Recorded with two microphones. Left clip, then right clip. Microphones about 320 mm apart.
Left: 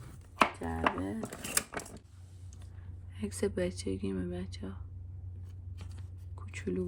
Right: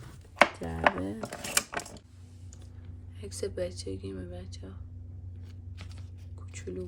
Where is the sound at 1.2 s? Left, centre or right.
Centre.